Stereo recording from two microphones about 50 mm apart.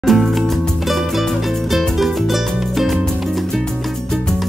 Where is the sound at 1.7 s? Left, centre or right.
Centre.